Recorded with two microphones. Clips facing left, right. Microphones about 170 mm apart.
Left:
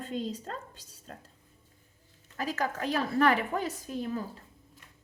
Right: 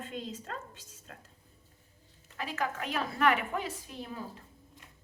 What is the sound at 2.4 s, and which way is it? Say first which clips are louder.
Speech: left 3 dB; 40° left (ahead or behind).